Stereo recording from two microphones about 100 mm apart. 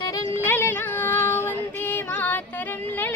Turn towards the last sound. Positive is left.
turn(degrees=20)  # may be behind; listen again after turning